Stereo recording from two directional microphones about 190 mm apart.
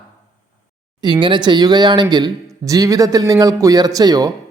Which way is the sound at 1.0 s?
25° right (ahead or behind).